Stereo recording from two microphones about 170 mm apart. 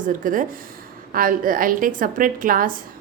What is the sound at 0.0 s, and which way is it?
A woman's voice, 50° right (ahead or behind).